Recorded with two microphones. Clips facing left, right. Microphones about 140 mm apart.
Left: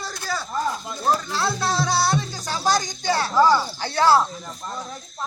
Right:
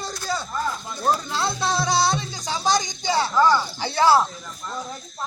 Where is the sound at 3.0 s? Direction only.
15° right (ahead or behind).